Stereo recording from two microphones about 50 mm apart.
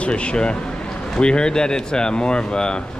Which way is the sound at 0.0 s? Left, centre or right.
Left.